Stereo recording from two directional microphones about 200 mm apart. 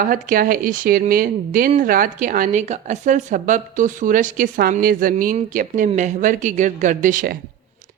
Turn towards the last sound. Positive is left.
turn(degrees=-45)  # may be behind; listen again after turning